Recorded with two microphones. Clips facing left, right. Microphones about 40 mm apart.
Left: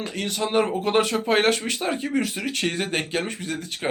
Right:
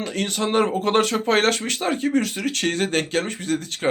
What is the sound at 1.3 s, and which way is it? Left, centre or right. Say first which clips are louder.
Speech: right 1 dB; centre.